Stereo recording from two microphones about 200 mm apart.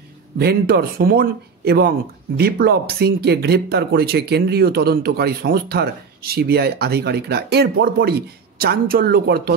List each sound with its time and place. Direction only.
0.4 s speech: 50° right (ahead or behind)